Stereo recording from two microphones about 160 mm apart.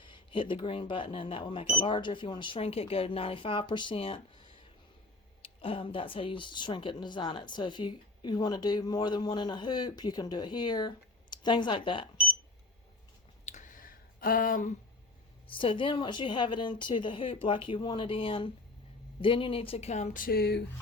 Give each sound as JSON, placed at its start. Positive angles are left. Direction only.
{"t": 0.0, "sound": "speech", "side_deg": 30}
{"t": 5.4, "sound": "speech", "side_deg": 35}
{"t": 13.4, "sound": "a sound", "side_deg": 50}
{"t": 15.5, "sound": "speech", "side_deg": 30}